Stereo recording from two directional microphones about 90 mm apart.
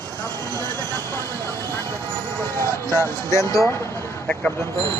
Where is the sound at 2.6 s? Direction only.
35° right (ahead or behind).